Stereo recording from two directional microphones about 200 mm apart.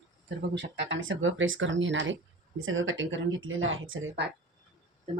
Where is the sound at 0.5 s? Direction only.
65° right (ahead or behind).